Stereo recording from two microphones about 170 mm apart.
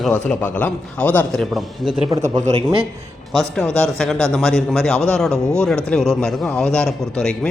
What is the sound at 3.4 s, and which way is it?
A man's voice, 5° left (ahead or behind).